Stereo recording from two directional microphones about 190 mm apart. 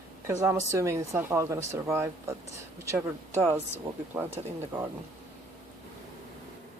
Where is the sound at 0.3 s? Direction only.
15° right (ahead or behind).